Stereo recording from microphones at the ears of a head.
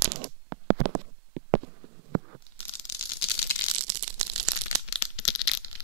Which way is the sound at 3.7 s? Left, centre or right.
Right.